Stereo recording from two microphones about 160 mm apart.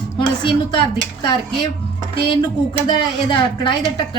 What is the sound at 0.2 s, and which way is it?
A woman's voice, 30° left (ahead or behind).